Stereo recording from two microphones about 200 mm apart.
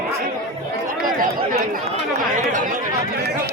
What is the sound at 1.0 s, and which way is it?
Chatter, 45° right (ahead or behind).